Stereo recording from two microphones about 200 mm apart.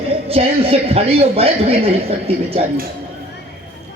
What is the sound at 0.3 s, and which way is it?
A woman's voice, 30° right (ahead or behind).